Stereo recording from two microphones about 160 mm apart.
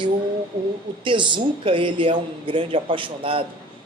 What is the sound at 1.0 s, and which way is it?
Speech, 30° right (ahead or behind).